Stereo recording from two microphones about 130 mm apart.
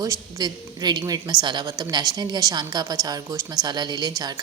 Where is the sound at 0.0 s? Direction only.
30° right (ahead or behind).